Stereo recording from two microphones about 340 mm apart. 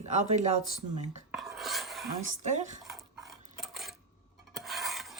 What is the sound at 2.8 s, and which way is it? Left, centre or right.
Dog, centre.